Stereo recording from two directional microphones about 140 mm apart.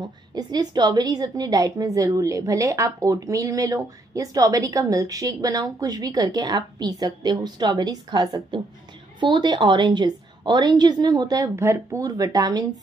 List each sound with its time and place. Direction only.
0.3 s a woman's voice: 30° right (ahead or behind)